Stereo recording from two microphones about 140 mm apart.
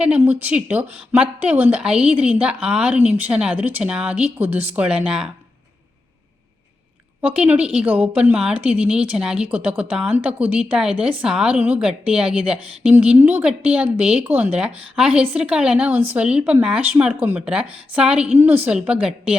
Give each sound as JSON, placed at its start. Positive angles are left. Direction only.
{"t": 0.0, "sound": "a woman's voice", "side_deg": -10}
{"t": 7.2, "sound": "a woman's voice", "side_deg": -10}